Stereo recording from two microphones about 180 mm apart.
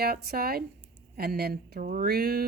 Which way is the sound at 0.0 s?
60° right (ahead or behind).